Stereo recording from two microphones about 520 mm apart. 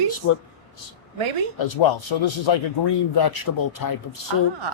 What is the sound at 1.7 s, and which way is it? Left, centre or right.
A man's voice, left.